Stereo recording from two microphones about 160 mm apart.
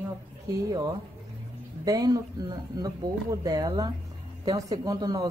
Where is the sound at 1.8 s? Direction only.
25° right (ahead or behind).